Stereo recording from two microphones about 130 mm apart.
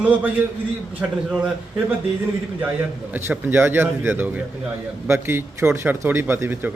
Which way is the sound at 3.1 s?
15° right (ahead or behind).